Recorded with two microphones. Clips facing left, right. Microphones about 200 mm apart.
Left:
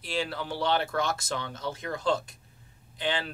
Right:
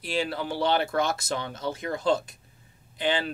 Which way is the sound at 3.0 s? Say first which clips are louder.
Right 4 dB; 15° right (ahead or behind).